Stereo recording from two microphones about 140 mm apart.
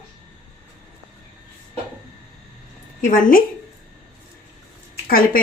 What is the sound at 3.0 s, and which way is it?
Speech, 80° left.